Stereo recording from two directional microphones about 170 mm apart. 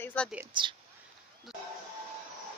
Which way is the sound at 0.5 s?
25° right (ahead or behind).